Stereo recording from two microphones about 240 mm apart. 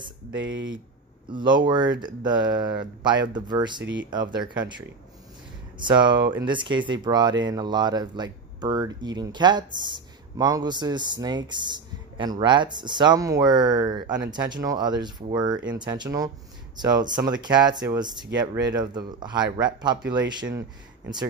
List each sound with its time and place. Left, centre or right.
0.3 s speech: right
1.3 s speech: centre
3.8 s speech: right
4.1 s speech: centre